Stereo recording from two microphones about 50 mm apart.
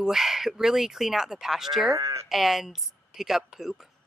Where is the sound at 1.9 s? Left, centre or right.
Right.